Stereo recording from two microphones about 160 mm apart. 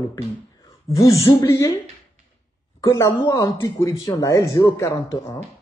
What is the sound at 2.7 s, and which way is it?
Speech, 20° left (ahead or behind).